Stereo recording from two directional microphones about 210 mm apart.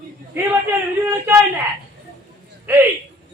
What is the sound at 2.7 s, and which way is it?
Speech, 10° right (ahead or behind).